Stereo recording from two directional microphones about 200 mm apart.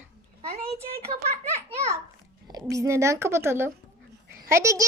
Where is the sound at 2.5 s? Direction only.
15° right (ahead or behind).